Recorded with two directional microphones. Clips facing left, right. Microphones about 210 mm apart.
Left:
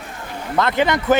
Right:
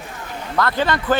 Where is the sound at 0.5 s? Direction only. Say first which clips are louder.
Left 2 dB; 20° left (ahead or behind).